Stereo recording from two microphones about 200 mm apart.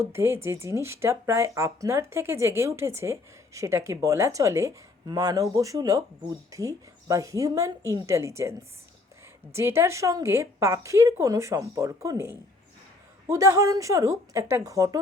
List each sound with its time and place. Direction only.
0.0 s speech: 10° right (ahead or behind)